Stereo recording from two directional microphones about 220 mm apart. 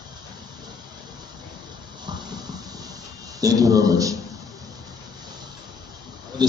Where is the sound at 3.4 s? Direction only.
15° right (ahead or behind).